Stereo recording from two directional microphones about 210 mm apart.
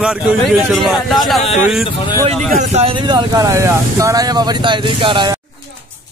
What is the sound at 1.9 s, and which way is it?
Speech, 25° left (ahead or behind).